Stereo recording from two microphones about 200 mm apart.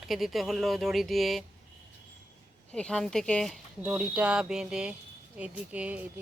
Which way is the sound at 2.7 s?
5° left (ahead or behind).